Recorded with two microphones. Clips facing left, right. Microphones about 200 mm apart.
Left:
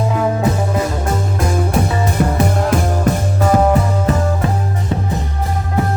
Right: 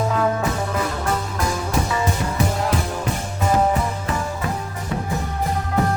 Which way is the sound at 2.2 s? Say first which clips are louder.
Left 6 dB; 50° left (ahead or behind).